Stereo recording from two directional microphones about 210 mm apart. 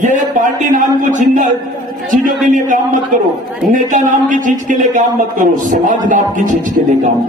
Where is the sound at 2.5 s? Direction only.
40° right (ahead or behind).